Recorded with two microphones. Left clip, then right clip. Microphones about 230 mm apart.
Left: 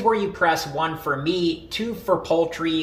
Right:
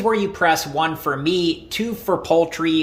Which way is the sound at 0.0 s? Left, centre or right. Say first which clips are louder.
Right 2 dB; right.